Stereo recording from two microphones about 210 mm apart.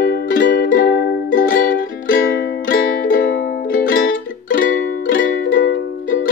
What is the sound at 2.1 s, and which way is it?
Music, 60° left (ahead or behind).